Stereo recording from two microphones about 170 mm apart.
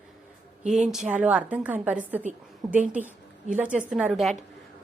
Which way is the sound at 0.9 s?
5° right (ahead or behind).